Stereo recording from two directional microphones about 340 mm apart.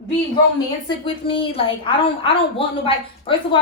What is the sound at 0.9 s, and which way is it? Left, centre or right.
A woman's voice, centre.